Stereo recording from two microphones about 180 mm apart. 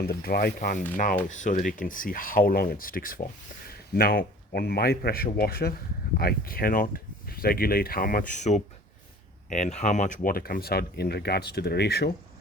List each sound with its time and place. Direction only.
0.0 s speech: 60° left (ahead or behind)
1.3 s a man's voice: 45° left (ahead or behind); by 12.1 s 65° left (ahead or behind)